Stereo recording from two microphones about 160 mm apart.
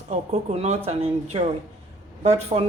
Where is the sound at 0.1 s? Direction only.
45° right (ahead or behind).